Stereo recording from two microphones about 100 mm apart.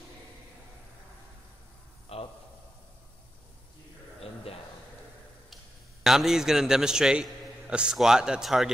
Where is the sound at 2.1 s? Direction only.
75° left (ahead or behind).